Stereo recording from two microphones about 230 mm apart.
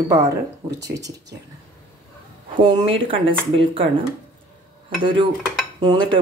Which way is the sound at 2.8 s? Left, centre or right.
Right.